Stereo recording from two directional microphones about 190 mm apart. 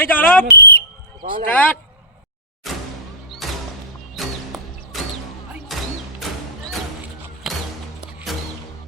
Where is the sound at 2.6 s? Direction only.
Centre (ahead or behind).